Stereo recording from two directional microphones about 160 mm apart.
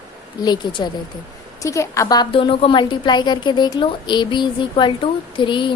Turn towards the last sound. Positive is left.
turn(degrees=30)  # may be behind; listen again after turning